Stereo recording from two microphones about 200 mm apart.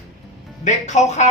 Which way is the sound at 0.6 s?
35° left (ahead or behind).